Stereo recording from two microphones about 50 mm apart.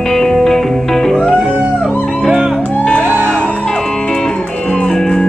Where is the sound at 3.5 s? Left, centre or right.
Centre.